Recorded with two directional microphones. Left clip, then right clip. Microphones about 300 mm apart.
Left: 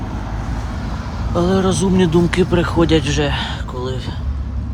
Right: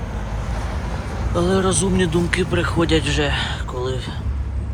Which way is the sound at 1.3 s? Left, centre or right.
Centre.